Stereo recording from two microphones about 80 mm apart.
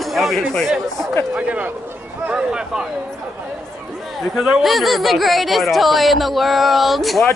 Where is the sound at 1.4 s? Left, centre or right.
Centre.